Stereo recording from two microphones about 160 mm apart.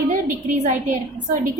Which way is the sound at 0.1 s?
50° right (ahead or behind).